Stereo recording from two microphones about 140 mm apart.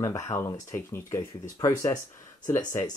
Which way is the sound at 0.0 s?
20° left (ahead or behind).